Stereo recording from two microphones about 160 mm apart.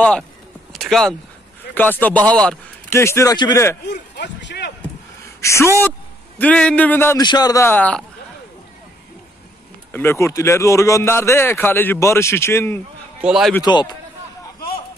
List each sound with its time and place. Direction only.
0.7 s speech: 5° left (ahead or behind)
2.9 s speech: 15° left (ahead or behind)
4.2 s a sound: 90° left
5.2 s a sound: 20° left (ahead or behind)
5.8 s a man's voice: 10° left (ahead or behind)
7.2 s speech: 25° left (ahead or behind)
9.9 s speech: 15° left (ahead or behind)
13.2 s a man's voice: 5° right (ahead or behind)
13.6 s speech: 25° left (ahead or behind)